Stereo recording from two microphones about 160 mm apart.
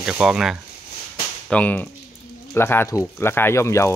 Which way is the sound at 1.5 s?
10° left (ahead or behind).